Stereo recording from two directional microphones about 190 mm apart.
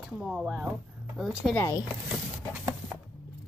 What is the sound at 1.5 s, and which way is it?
Speech, 15° left (ahead or behind).